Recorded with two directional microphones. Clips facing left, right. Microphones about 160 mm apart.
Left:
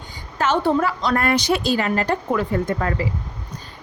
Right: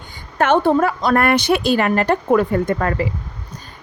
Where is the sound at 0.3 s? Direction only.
55° right (ahead or behind).